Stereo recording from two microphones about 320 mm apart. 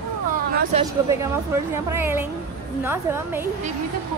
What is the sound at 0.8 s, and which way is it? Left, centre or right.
A woman's voice, centre.